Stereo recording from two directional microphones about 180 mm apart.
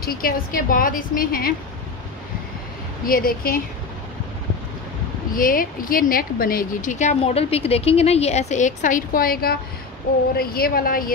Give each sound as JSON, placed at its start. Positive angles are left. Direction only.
{"t": 0.0, "sound": "a woman's voice", "side_deg": 55}
{"t": 3.1, "sound": "speech", "side_deg": 55}
{"t": 5.3, "sound": "a woman's voice", "side_deg": 50}